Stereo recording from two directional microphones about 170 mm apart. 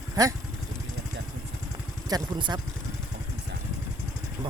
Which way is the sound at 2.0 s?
25° right (ahead or behind).